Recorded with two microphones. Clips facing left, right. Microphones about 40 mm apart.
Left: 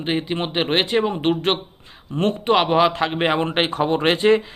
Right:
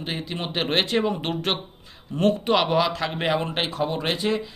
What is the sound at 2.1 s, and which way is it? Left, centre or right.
Speech, left.